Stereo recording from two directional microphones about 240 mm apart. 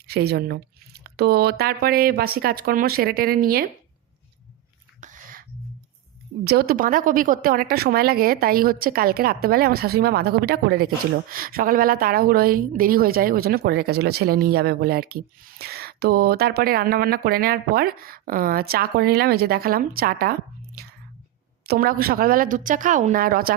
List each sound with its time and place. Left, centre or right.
0.1 s speech: right
4.9 s whispering: right
6.4 s speech: right
21.7 s speech: right